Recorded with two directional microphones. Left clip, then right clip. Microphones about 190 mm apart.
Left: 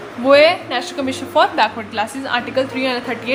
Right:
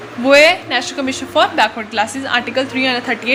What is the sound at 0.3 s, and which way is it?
A woman's voice, 5° right (ahead or behind).